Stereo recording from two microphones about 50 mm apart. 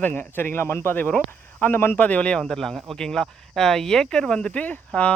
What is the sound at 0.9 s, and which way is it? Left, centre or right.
Speech, left.